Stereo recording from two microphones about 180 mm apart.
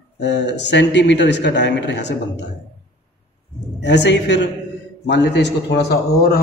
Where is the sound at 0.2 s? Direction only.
75° left (ahead or behind).